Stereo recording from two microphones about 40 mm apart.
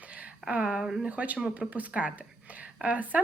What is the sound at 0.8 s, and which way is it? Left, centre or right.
Speech, centre.